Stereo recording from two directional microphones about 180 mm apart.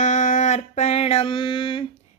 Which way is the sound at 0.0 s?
45° left (ahead or behind).